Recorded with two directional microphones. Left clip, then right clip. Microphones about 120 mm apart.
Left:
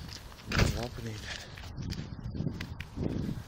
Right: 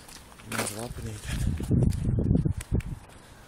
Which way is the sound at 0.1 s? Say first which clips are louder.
Left 1 dB; centre (ahead or behind).